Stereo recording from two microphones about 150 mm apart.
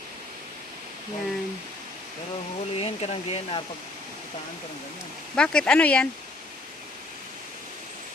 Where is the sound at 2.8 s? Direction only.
45° left (ahead or behind).